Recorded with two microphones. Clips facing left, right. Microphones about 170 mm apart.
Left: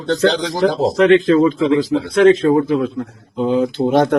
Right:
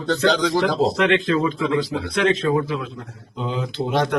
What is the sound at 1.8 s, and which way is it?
A man's voice, 45° left (ahead or behind).